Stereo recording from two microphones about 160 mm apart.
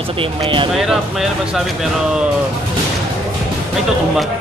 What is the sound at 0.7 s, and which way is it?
Speech, centre (ahead or behind).